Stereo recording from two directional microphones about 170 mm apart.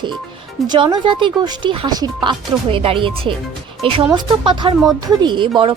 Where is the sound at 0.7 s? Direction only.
25° right (ahead or behind).